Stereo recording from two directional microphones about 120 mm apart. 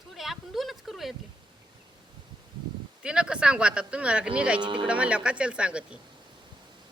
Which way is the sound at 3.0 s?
5° right (ahead or behind).